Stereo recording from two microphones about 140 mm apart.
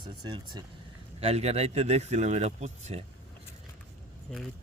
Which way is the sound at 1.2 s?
50° right (ahead or behind).